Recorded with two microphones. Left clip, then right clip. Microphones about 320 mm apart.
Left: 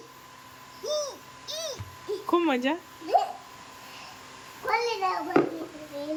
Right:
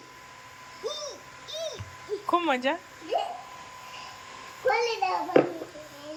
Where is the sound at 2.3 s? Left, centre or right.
Centre.